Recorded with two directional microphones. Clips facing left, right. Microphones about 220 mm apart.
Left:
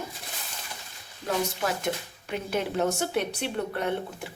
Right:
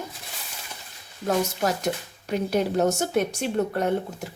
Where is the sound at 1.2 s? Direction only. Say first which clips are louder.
Right 4 dB; 40° right (ahead or behind).